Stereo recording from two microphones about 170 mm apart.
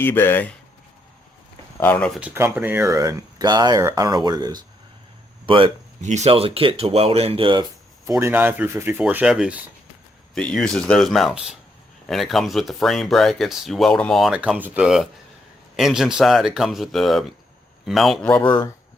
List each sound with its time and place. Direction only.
0.0 s speech: 10° left (ahead or behind)
1.8 s speech: 10° left (ahead or behind)
2.2 s speech: 10° right (ahead or behind); by 5.7 s 30° right (ahead or behind)
6.0 s speech: 45° right (ahead or behind)
8.2 s speech: 10° right (ahead or behind)
18.3 s speech: 25° left (ahead or behind)